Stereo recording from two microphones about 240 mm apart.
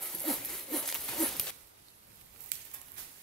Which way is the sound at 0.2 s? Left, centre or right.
Centre.